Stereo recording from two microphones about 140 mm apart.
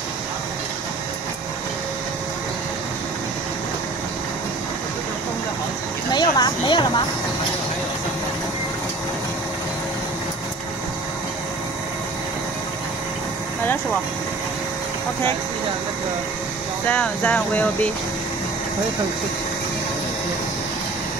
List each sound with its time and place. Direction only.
6.1 s speech: 30° left (ahead or behind)
16.8 s speech: 10° left (ahead or behind)